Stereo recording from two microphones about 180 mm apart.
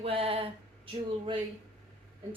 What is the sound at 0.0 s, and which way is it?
Speech, 30° right (ahead or behind).